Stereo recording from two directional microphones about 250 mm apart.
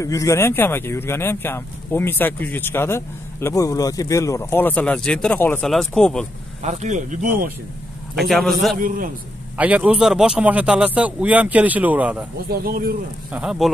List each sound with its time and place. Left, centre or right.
0.0 s speech: centre
6.6 s speech: right
8.2 s a man's voice: centre
8.7 s speech: right
9.6 s a man's voice: centre
12.4 s speech: right
13.3 s a man's voice: centre